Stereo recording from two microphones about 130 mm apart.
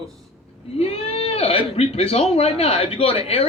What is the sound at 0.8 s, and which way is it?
Speech, 50° left (ahead or behind).